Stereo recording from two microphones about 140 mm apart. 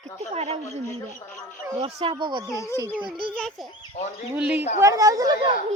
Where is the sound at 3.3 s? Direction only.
5° left (ahead or behind).